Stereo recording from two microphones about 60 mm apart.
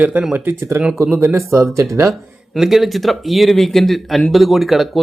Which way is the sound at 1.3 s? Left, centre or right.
Right.